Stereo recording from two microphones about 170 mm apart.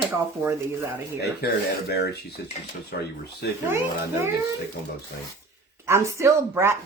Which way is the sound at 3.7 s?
15° right (ahead or behind).